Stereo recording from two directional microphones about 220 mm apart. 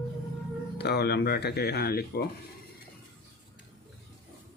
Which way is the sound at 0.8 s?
50° left (ahead or behind).